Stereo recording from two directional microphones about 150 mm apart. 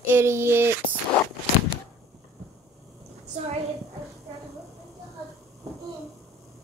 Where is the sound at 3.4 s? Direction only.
50° right (ahead or behind).